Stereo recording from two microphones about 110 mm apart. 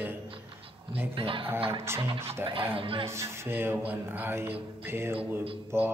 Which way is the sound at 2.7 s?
55° right (ahead or behind).